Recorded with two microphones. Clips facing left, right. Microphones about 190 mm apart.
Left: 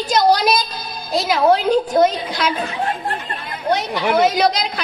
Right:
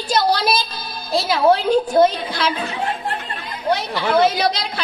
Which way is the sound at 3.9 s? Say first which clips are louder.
Even; 15° left (ahead or behind).